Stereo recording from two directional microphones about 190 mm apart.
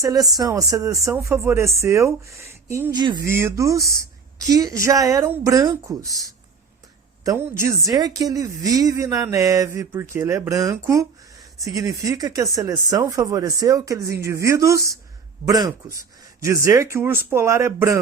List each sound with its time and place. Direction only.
0.0 s speech: 20° right (ahead or behind)
7.3 s speech: 15° right (ahead or behind)